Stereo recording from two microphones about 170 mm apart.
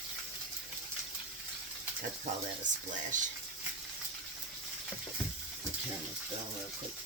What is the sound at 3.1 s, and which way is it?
Speech, 50° right (ahead or behind).